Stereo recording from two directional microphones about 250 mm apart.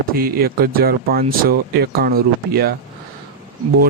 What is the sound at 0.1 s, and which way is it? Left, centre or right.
Speech, right.